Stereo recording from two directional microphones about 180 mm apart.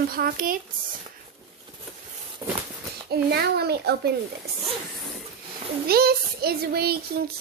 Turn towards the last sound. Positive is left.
turn(degrees=-60)  # may be behind; listen again after turning